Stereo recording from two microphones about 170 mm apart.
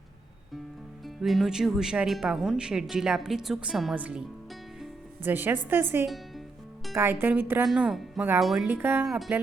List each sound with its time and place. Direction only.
1.0 s a woman's voice: centre (ahead or behind)
7.7 s speech: centre (ahead or behind)
8.6 s a woman's voice: 10° right (ahead or behind)
9.0 s speech: centre (ahead or behind)